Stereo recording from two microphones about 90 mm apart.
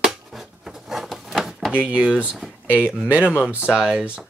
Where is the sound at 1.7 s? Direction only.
15° right (ahead or behind).